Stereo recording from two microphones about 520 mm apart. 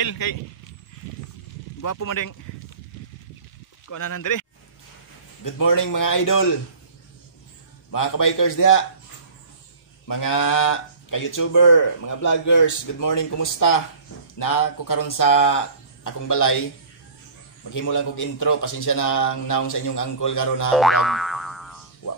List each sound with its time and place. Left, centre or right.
0.0 s speech: left
1.8 s speech: left
3.9 s speech: left
7.9 s speech: left
10.3 s speech: left
17.6 s speech: left
20.7 s boing: centre